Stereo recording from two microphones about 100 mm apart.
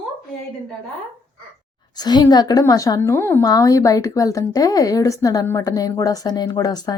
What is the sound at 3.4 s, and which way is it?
A woman's voice, 35° left (ahead or behind).